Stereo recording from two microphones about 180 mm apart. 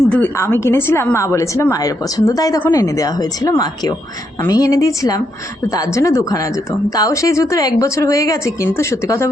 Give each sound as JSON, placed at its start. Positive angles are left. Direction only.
{"t": 0.1, "sound": "a woman's voice", "side_deg": 10}